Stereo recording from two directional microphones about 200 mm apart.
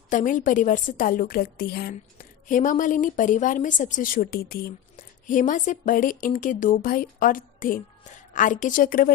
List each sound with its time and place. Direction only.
0.1 s a woman's voice: 40° left (ahead or behind)